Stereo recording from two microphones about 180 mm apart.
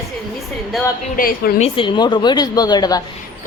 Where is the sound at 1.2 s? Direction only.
55° left (ahead or behind).